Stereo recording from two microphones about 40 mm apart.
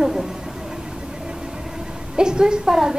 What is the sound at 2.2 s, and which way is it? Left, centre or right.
Speech, centre.